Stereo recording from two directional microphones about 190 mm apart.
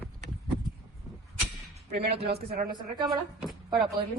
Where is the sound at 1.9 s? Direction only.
55° right (ahead or behind).